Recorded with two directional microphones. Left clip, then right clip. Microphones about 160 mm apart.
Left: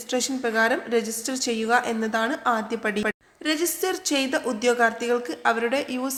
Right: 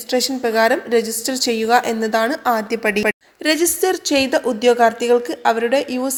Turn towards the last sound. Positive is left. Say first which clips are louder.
# right 7 dB
turn(degrees=-25)  # may be behind; listen again after turning